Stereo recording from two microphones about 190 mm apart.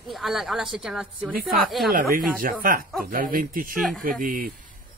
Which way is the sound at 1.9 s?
45° right (ahead or behind).